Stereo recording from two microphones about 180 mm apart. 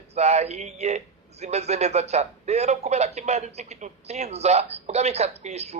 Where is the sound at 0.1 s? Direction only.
35° right (ahead or behind).